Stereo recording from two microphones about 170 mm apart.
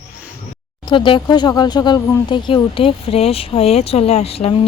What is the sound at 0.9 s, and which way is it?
Speech, 30° left (ahead or behind).